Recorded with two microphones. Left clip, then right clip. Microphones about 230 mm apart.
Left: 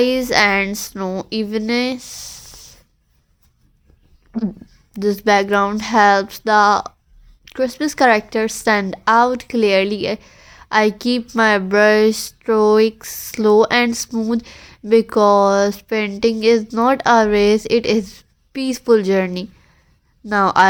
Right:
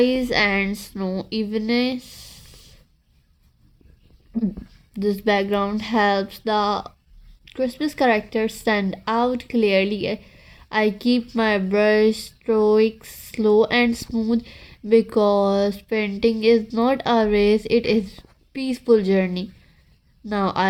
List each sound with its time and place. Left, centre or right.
0.0 s a woman's voice: centre
4.9 s a woman's voice: centre